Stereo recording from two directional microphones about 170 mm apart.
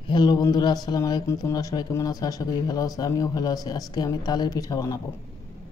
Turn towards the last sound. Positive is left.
turn(degrees=20)  # may be behind; listen again after turning